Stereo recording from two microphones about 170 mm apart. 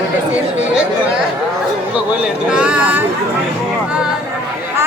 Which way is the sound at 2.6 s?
5° right (ahead or behind).